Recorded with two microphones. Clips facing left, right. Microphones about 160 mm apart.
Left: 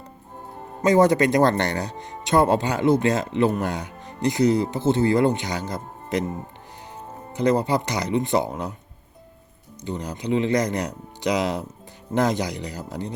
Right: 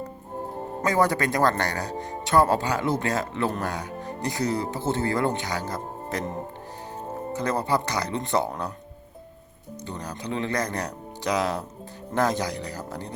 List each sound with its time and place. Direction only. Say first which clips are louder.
0.9 s speech: left 6 dB; 20° left (ahead or behind)
7.3 s speech: left 5 dB; 15° left (ahead or behind)
9.8 s speech: left 6 dB; 15° left (ahead or behind)